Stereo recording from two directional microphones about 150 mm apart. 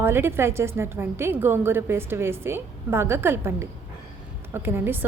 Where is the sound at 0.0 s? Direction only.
15° right (ahead or behind).